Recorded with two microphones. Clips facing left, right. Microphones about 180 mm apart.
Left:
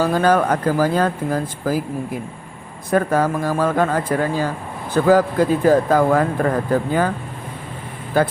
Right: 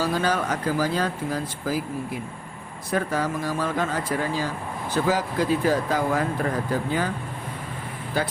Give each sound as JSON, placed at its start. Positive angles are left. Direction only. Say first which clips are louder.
{"t": 0.0, "sound": "speech", "louder": "left 8 dB", "side_deg": 50}
{"t": 2.9, "sound": "speech", "louder": "left 7 dB", "side_deg": 50}
{"t": 8.1, "sound": "speech", "louder": "left 9 dB", "side_deg": 50}